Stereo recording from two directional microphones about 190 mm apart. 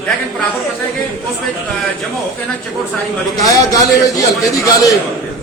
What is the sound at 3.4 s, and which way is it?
Speech, 20° left (ahead or behind).